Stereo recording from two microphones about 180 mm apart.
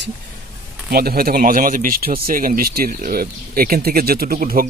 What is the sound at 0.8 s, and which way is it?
Speech, 60° right (ahead or behind).